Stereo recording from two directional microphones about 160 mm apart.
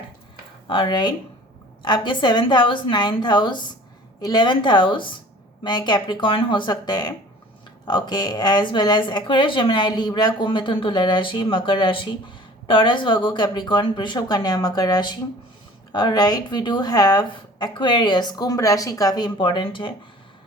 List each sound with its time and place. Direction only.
0.7 s speech: 30° left (ahead or behind)